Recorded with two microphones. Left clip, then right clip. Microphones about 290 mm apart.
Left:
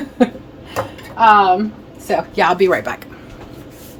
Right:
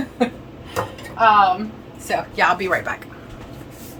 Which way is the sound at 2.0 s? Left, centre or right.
Left.